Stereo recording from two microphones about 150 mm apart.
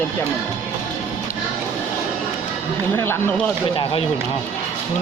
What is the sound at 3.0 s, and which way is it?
Speech, 15° left (ahead or behind).